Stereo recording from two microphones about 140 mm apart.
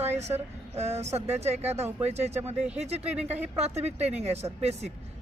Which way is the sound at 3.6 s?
50° right (ahead or behind).